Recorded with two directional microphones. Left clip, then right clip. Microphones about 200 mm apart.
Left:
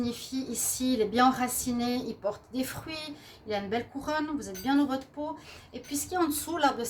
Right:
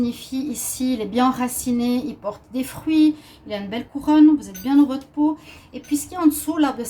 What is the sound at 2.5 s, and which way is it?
Speech, 40° left (ahead or behind).